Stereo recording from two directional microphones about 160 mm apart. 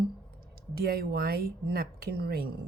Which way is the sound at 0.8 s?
70° right (ahead or behind).